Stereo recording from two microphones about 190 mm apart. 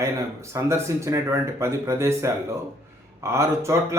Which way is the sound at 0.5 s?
15° right (ahead or behind).